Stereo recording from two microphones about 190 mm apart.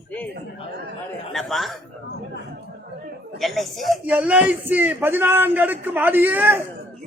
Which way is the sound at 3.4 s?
Centre (ahead or behind).